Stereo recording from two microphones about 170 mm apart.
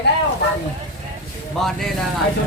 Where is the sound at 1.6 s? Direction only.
5° left (ahead or behind).